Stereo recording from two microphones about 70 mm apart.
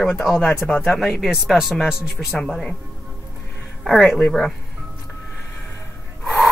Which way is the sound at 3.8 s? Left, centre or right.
Centre.